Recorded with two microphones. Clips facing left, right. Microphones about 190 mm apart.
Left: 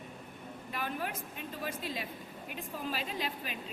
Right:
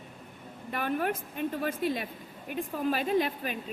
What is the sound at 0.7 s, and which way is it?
A woman's voice, 55° right (ahead or behind).